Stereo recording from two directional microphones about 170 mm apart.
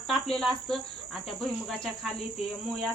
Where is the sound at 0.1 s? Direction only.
Centre (ahead or behind).